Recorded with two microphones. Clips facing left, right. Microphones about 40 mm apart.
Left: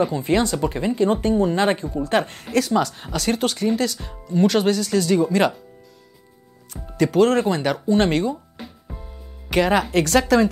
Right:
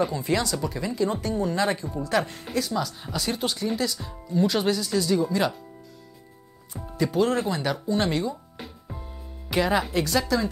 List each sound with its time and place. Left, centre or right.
0.1 s speech: left
7.0 s speech: left
7.3 s speech: left
8.5 s music: centre
9.5 s speech: left
10.0 s a woman's voice: left